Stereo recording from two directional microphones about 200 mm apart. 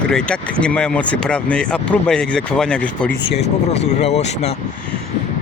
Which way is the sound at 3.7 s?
35° left (ahead or behind).